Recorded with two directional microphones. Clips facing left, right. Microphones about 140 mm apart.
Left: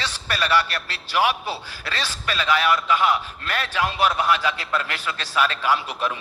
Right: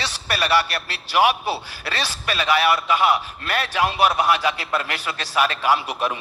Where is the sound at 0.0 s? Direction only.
15° right (ahead or behind).